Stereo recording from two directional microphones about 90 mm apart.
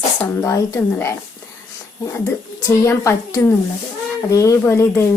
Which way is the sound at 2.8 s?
30° left (ahead or behind).